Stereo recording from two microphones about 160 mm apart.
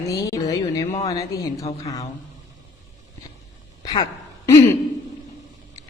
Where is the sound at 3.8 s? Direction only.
25° left (ahead or behind).